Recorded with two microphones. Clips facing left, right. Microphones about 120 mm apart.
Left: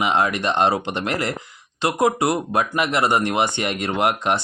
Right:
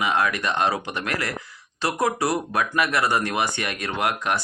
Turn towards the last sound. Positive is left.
turn(degrees=25)  # may be behind; listen again after turning